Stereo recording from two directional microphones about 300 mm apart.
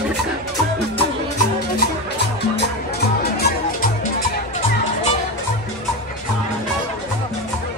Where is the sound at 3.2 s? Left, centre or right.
Left.